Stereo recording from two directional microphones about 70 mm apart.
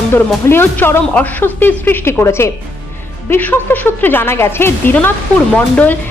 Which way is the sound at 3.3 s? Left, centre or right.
Left.